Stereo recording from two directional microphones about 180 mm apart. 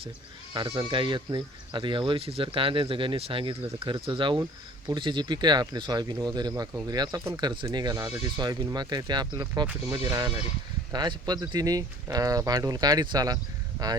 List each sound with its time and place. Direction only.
0.5 s speech: 25° right (ahead or behind)